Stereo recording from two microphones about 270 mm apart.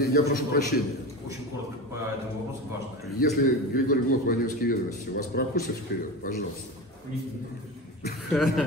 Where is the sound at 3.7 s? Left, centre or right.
Left.